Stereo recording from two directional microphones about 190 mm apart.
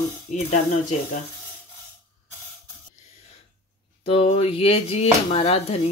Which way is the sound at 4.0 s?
30° left (ahead or behind).